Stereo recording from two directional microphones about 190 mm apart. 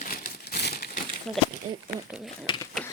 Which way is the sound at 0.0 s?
50° left (ahead or behind).